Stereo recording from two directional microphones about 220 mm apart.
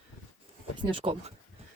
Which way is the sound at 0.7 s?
25° right (ahead or behind).